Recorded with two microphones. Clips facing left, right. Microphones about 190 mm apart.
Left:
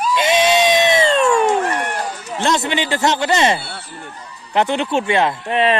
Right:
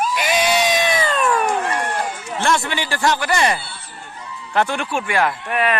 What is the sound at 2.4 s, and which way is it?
Speech, 20° left (ahead or behind).